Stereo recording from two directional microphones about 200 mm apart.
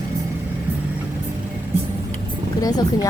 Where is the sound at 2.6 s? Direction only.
20° left (ahead or behind).